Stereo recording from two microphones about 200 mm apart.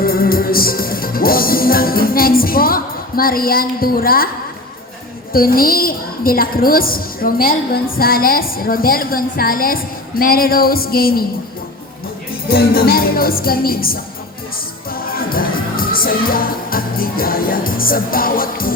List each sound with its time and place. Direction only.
0.0 s music: 45° left (ahead or behind)
5.3 s a woman's voice: 45° left (ahead or behind)
12.5 s a woman's voice: 50° left (ahead or behind)
14.8 s music: 45° left (ahead or behind)